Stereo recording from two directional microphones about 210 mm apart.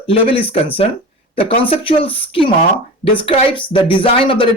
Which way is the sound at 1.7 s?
25° left (ahead or behind).